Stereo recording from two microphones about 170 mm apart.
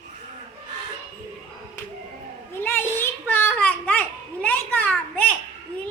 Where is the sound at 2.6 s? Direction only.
10° left (ahead or behind).